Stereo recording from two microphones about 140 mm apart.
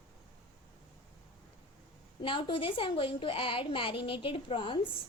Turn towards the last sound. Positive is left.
turn(degrees=35)  # may be behind; listen again after turning